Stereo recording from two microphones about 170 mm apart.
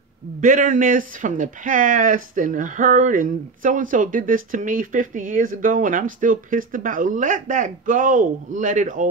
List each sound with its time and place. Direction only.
0.4 s speech: 50° right (ahead or behind)